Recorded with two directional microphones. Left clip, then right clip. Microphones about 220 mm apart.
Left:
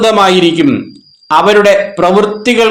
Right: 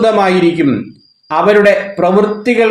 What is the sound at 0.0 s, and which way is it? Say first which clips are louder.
A man's voice: left 3 dB; 20° left (ahead or behind).